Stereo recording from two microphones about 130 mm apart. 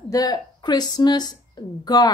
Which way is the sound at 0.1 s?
30° left (ahead or behind).